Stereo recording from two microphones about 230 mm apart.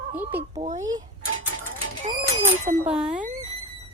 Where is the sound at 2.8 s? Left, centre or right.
Centre.